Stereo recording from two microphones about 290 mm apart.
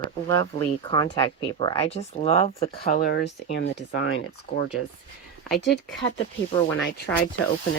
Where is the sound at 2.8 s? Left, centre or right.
Left.